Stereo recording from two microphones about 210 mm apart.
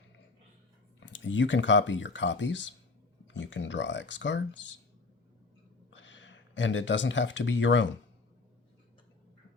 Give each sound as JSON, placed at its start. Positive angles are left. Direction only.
{"t": 0.9, "sound": "speech", "side_deg": 60}
{"t": 5.9, "sound": "speech", "side_deg": 60}